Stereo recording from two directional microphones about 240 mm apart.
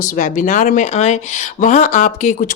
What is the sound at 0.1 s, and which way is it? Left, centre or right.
A woman's voice, left.